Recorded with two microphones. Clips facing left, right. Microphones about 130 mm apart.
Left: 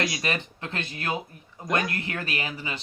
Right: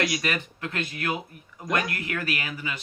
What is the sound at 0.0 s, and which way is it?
Speech, 25° left (ahead or behind).